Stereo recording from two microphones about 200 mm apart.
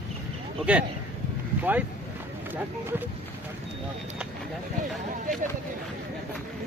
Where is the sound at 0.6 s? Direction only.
5° right (ahead or behind).